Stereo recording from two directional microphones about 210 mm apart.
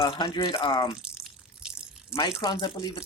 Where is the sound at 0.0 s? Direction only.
25° left (ahead or behind).